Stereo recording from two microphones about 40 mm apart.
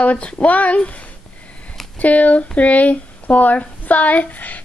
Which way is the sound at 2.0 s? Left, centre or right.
Left.